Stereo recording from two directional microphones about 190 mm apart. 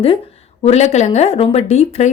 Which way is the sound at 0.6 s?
35° left (ahead or behind).